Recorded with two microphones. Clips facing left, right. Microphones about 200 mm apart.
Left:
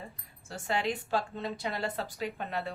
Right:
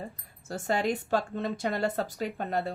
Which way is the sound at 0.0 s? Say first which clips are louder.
Right 6 dB; 40° right (ahead or behind).